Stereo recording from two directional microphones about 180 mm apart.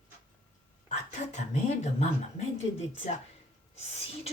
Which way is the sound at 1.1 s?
40° left (ahead or behind).